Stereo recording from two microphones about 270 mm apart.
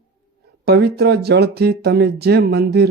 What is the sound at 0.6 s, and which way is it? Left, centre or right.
Speech, right.